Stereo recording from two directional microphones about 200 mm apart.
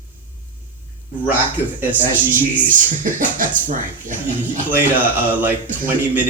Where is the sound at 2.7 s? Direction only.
40° right (ahead or behind).